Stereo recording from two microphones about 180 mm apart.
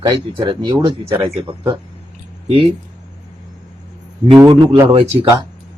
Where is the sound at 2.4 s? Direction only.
30° right (ahead or behind).